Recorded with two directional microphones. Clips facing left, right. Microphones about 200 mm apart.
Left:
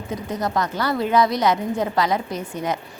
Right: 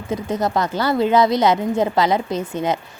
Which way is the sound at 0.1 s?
25° right (ahead or behind).